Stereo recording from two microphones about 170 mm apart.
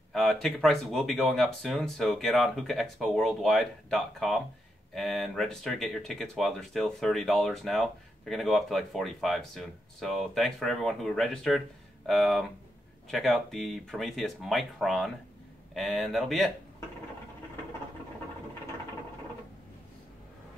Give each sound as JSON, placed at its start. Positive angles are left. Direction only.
{"t": 0.1, "sound": "speech", "side_deg": 0}